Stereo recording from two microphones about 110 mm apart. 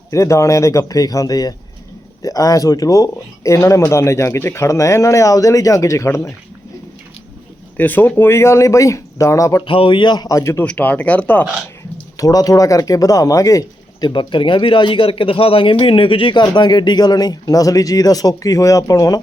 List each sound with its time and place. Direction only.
0.1 s speech: 25° left (ahead or behind)
7.8 s speech: 15° left (ahead or behind)
9.6 s speech: 50° left (ahead or behind); by 10.6 s 30° left (ahead or behind)
10.6 s speech: 15° left (ahead or behind)
12.1 s speech: 35° left (ahead or behind)